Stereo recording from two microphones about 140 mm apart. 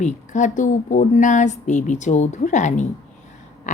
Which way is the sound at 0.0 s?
60° left (ahead or behind).